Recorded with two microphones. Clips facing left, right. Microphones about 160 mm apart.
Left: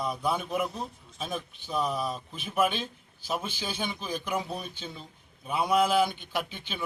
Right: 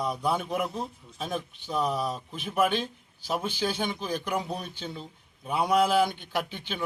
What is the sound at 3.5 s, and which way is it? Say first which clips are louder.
Speech: right 5 dB; 15° left (ahead or behind).